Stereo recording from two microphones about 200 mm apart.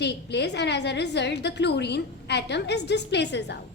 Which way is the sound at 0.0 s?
55° left (ahead or behind).